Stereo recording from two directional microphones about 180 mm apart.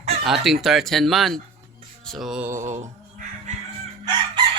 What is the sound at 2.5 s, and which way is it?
Music, 40° right (ahead or behind).